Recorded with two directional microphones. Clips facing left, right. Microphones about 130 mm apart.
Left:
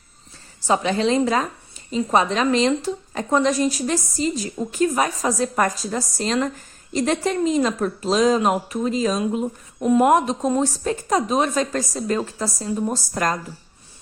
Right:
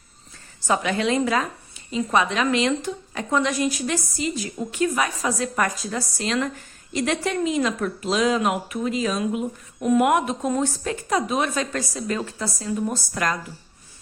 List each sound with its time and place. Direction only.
0.7 s speech: 30° left (ahead or behind)